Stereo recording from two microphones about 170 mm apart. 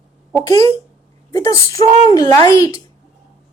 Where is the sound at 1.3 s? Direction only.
20° left (ahead or behind).